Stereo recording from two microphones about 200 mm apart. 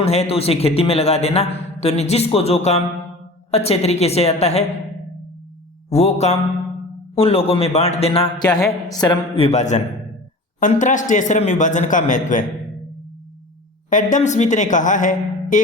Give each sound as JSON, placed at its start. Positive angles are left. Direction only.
{"t": 0.0, "sound": "a man's voice", "side_deg": 30}
{"t": 5.9, "sound": "a man's voice", "side_deg": 30}
{"t": 13.9, "sound": "a man's voice", "side_deg": 35}